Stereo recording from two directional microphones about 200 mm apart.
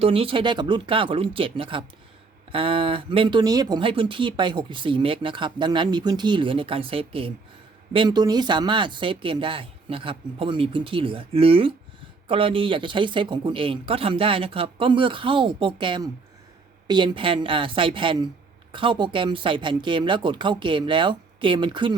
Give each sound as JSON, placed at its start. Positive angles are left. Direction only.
{"t": 0.0, "sound": "speech", "side_deg": -30}